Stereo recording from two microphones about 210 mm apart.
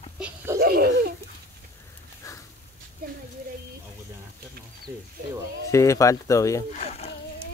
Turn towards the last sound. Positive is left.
turn(degrees=30)  # may be behind; listen again after turning